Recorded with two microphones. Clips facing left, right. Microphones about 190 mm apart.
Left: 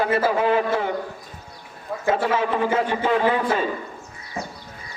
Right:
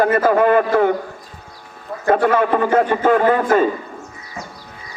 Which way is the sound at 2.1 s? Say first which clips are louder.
Right 6 dB; 55° right (ahead or behind).